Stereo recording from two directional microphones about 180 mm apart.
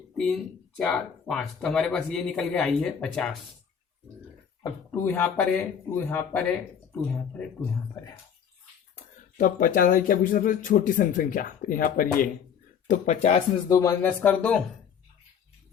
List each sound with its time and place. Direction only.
0.8 s speech: 5° left (ahead or behind)
4.9 s speech: 10° left (ahead or behind)
9.4 s speech: 50° left (ahead or behind)
12.9 s speech: 40° left (ahead or behind)
13.7 s speech: 20° left (ahead or behind)